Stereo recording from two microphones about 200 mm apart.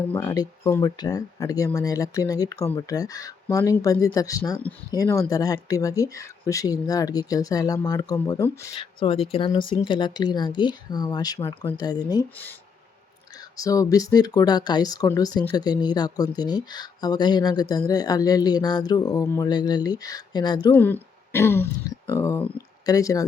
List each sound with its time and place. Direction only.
0.0 s speech: 10° left (ahead or behind)
8.7 s speech: 25° left (ahead or behind)
13.6 s speech: 15° left (ahead or behind)
20.7 s speech: 10° left (ahead or behind)